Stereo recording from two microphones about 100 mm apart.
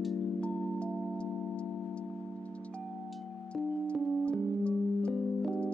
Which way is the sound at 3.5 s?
10° left (ahead or behind).